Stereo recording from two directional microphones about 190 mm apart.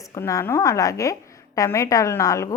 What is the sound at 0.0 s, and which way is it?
A woman's voice, 15° left (ahead or behind).